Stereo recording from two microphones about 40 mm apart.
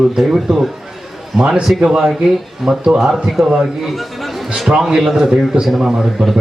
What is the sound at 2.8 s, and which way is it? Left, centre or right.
Speech, centre.